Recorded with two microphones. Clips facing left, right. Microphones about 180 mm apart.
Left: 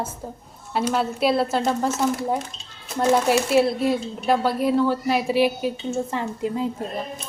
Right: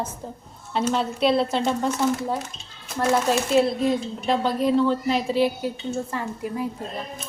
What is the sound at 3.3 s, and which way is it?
Speech, 10° left (ahead or behind).